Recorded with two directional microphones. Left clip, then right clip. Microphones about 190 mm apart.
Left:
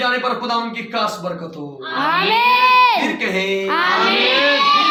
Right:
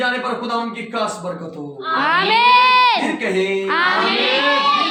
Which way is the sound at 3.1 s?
10° right (ahead or behind).